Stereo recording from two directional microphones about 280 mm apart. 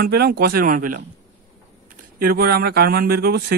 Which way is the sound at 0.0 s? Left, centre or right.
Right.